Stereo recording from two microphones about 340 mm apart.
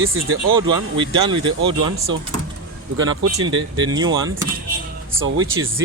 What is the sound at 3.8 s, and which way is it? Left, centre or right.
Speech, centre.